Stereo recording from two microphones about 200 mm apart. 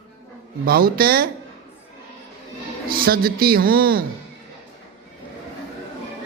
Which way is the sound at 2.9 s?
50° right (ahead or behind).